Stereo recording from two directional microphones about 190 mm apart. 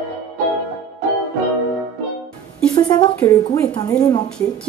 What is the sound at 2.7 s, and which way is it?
A woman's voice, 20° left (ahead or behind).